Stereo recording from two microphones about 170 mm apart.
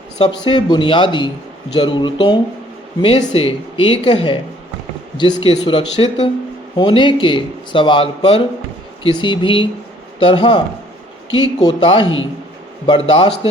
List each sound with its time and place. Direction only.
0.2 s speech: 25° left (ahead or behind)